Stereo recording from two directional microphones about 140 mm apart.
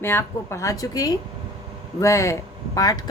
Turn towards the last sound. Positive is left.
turn(degrees=25)  # may be behind; listen again after turning